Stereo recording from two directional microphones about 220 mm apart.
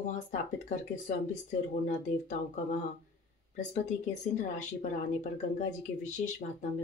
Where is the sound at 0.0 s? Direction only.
35° left (ahead or behind).